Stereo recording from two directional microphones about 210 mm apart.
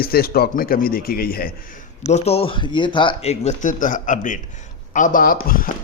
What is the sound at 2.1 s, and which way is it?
A man's voice, 30° left (ahead or behind).